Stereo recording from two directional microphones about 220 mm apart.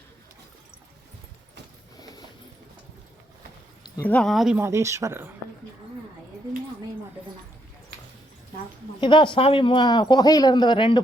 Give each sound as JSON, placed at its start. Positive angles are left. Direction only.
{"t": 2.0, "sound": "a sound", "side_deg": 15}
{"t": 3.8, "sound": "speech", "side_deg": 10}
{"t": 9.0, "sound": "speech", "side_deg": 20}